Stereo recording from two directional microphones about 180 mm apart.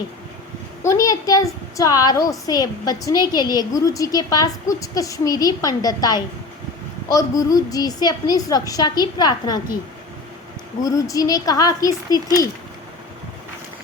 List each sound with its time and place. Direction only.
0.8 s a child's voice: 15° left (ahead or behind)
10.8 s a child's voice: 20° left (ahead or behind)